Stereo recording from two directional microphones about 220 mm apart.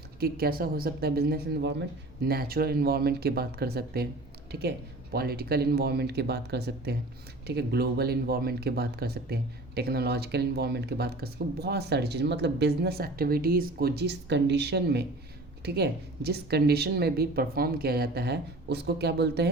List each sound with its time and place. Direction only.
0.2 s speech: 45° right (ahead or behind)